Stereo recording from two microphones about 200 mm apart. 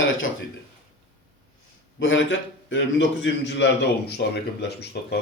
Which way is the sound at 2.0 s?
70° left (ahead or behind).